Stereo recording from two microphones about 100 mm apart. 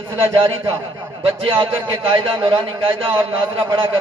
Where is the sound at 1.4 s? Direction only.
65° right (ahead or behind).